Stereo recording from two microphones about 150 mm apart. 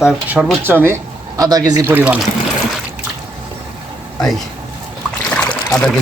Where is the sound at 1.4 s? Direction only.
25° right (ahead or behind).